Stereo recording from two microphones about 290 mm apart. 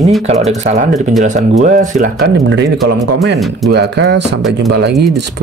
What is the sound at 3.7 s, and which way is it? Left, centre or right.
Speech, right.